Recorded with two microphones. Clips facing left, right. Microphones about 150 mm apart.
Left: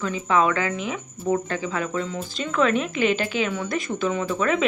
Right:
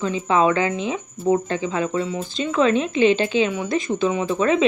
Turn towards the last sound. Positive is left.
turn(degrees=-25)  # may be behind; listen again after turning